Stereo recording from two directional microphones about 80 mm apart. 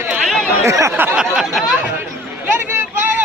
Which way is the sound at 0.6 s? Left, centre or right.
Right.